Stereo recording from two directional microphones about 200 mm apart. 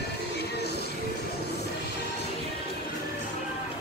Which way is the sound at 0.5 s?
55° left (ahead or behind).